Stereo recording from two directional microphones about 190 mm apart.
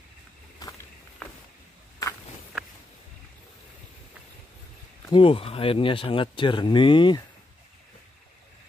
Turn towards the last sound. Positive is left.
turn(degrees=25)  # may be behind; listen again after turning